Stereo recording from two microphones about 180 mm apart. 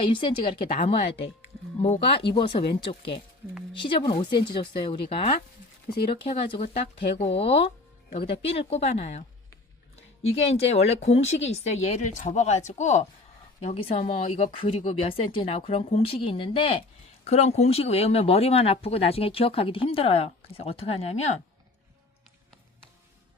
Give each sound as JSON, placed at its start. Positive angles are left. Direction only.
{"t": 0.0, "sound": "speech", "side_deg": 30}